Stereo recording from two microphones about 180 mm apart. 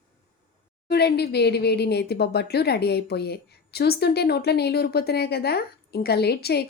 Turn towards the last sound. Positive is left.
turn(degrees=65)  # may be behind; listen again after turning